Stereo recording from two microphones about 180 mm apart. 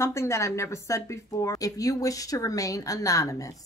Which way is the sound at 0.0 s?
15° left (ahead or behind).